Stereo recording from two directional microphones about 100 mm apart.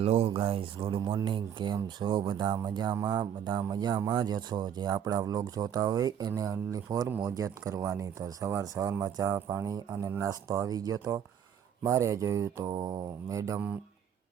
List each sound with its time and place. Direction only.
0.0 s speech: 90° right
0.3 s speech: 65° right (ahead or behind)
1.0 s speech: 45° right (ahead or behind); by 9.7 s 25° right (ahead or behind)
9.7 s speech: 35° right (ahead or behind)